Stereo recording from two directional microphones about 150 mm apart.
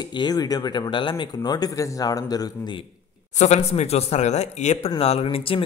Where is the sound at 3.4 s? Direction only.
45° left (ahead or behind).